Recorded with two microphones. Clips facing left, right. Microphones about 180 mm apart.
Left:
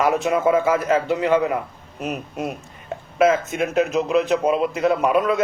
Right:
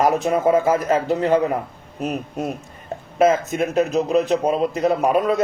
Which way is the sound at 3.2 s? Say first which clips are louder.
Right 1 dB; 40° right (ahead or behind).